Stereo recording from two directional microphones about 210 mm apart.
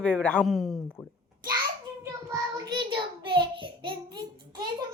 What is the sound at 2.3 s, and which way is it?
Child singing, 20° right (ahead or behind).